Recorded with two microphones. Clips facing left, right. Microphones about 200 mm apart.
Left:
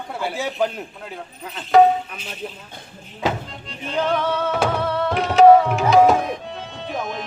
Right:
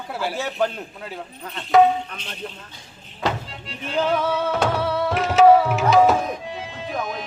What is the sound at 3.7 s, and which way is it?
Speech, 5° right (ahead or behind).